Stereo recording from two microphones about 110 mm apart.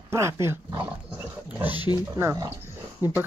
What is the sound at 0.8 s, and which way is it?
Wild animals, 15° right (ahead or behind).